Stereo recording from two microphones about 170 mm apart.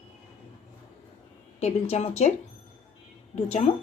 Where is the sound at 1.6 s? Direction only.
40° left (ahead or behind).